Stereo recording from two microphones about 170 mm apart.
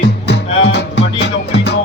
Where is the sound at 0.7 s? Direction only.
90° left.